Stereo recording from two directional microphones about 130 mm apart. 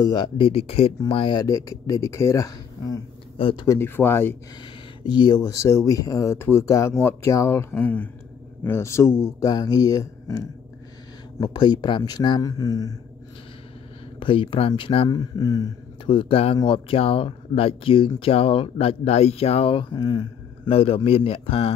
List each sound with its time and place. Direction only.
0.1 s speech: 45° left (ahead or behind); by 2.9 s 25° left (ahead or behind)
3.3 s speech: 45° left (ahead or behind)
3.6 s speech: 20° left (ahead or behind)
5.0 s speech: 35° left (ahead or behind)
14.2 s speech: 40° left (ahead or behind)
15.0 s speech: 30° left (ahead or behind)
16.1 s speech: 45° left (ahead or behind)
20.7 s speech: 45° left (ahead or behind)